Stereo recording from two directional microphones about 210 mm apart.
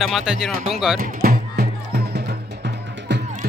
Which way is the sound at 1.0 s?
45° right (ahead or behind).